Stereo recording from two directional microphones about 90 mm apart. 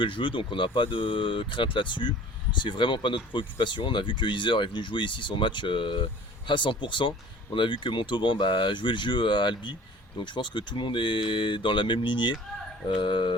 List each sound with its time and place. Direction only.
0.0 s speech: 65° left (ahead or behind)